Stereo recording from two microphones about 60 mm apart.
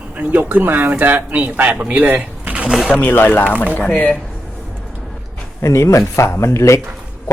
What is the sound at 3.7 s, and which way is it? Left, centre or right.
Speech, left.